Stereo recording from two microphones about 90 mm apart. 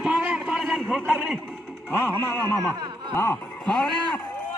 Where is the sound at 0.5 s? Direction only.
Centre (ahead or behind).